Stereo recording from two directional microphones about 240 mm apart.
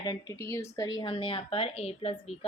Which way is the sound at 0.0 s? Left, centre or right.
Centre.